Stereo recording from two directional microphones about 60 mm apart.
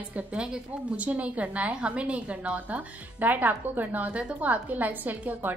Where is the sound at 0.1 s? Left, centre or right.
Centre.